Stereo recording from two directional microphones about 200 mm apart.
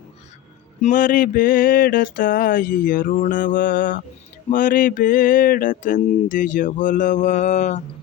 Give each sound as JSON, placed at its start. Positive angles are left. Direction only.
{"t": 0.8, "sound": "mantra", "side_deg": 40}